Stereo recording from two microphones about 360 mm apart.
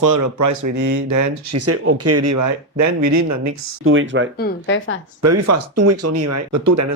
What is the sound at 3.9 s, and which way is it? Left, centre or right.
Speech, right.